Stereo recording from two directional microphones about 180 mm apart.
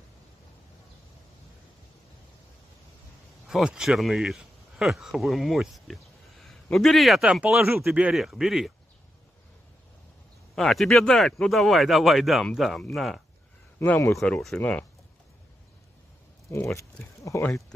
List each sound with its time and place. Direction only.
3.4 s speech: 5° right (ahead or behind)
10.5 s speech: centre (ahead or behind)
13.7 s speech: 15° left (ahead or behind)
14.1 s speech: 5° left (ahead or behind)
16.7 s speech: 15° left (ahead or behind)